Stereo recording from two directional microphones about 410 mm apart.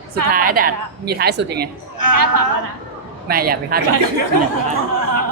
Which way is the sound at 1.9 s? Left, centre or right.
Right.